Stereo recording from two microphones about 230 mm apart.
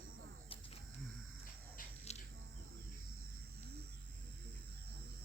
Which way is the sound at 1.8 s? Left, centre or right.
Left.